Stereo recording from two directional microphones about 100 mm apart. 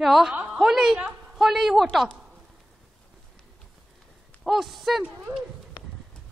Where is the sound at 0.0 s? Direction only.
Centre (ahead or behind).